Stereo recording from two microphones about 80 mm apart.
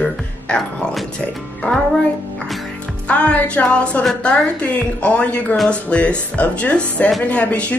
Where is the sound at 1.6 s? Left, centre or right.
Centre.